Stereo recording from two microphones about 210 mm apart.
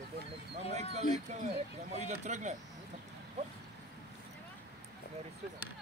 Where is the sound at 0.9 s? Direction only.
30° right (ahead or behind).